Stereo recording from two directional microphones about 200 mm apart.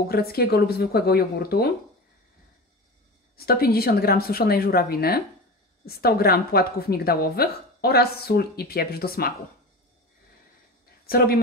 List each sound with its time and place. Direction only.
0.1 s a woman's voice: 50° left (ahead or behind)
3.3 s a woman's voice: 50° left (ahead or behind)
11.1 s a woman's voice: 50° left (ahead or behind)